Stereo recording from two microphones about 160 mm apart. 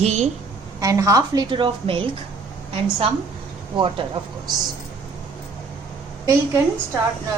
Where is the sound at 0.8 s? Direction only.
20° right (ahead or behind).